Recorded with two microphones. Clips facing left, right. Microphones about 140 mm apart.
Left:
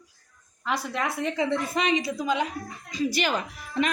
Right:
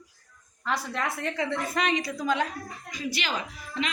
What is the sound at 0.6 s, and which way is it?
A woman's voice, 10° left (ahead or behind).